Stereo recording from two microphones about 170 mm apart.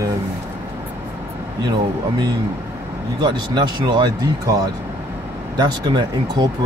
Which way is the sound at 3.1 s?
25° right (ahead or behind).